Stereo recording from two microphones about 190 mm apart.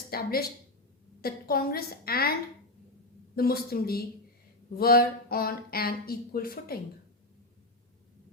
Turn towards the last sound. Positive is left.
turn(degrees=50)  # may be behind; listen again after turning